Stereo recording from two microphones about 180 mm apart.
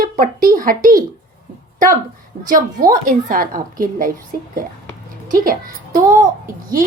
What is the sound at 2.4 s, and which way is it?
A woman's voice, 50° right (ahead or behind).